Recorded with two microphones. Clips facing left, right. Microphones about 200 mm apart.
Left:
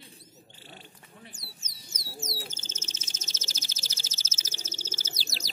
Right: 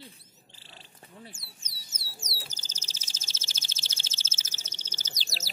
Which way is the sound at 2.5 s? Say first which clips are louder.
Left 6 dB; 35° right (ahead or behind).